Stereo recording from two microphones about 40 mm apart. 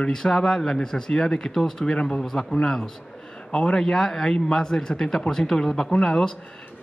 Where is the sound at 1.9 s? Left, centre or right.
Left.